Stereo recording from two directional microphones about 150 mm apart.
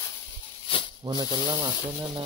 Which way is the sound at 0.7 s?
35° left (ahead or behind).